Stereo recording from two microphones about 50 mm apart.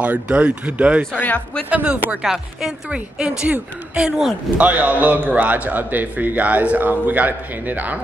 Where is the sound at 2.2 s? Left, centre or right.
Centre.